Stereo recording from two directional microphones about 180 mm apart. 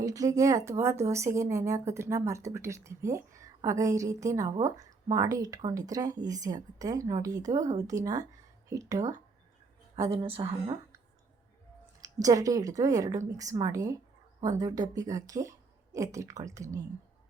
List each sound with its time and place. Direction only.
0.0 s a woman's voice: 20° right (ahead or behind)
9.9 s a woman's voice: 30° right (ahead or behind)
12.0 s a woman's voice: 20° right (ahead or behind)